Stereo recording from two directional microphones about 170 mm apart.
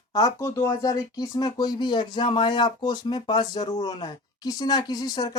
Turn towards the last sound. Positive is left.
turn(degrees=20)  # may be behind; listen again after turning